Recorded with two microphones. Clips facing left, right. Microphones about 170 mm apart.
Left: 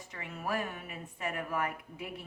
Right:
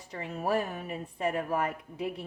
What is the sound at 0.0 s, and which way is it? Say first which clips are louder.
Speech: right 6 dB; 35° right (ahead or behind).